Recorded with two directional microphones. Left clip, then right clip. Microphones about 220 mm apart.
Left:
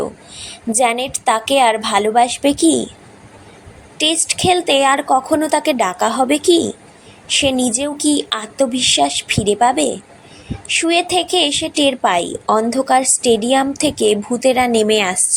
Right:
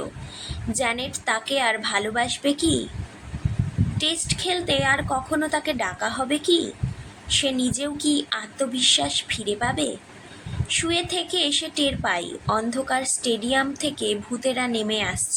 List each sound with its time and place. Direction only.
0.4 s a woman's voice: 30° left (ahead or behind)
3.9 s a woman's voice: 30° left (ahead or behind)